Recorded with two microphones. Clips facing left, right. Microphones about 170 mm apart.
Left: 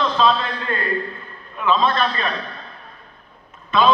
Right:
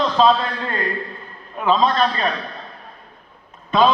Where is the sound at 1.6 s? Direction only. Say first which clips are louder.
Right 2 dB; 35° right (ahead or behind).